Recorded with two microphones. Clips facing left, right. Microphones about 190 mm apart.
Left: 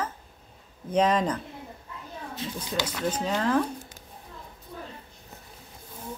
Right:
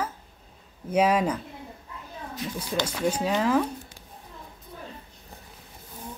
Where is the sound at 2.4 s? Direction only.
25° left (ahead or behind).